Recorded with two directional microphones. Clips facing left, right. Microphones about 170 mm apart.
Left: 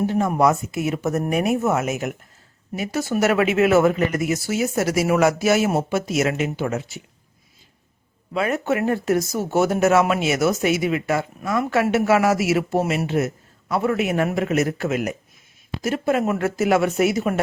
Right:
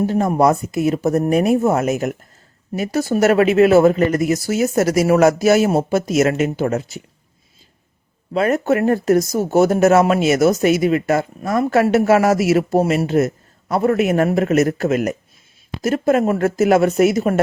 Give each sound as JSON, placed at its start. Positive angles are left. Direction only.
{"t": 0.0, "sound": "speech", "side_deg": -40}
{"t": 8.3, "sound": "speech", "side_deg": -40}